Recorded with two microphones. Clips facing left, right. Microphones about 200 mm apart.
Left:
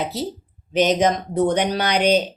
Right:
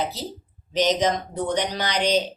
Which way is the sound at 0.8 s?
55° left (ahead or behind).